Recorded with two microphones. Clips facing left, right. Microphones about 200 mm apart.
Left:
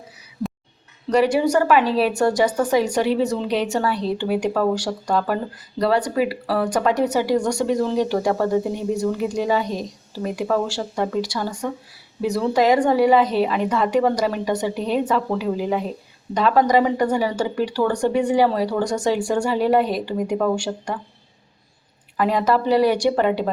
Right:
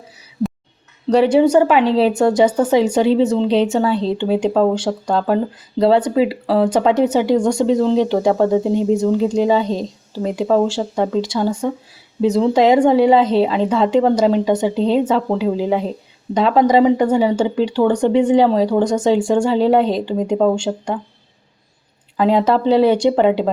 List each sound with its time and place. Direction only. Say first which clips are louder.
1.1 s speech: right 5 dB; 25° right (ahead or behind)
22.2 s speech: right 5 dB; 25° right (ahead or behind)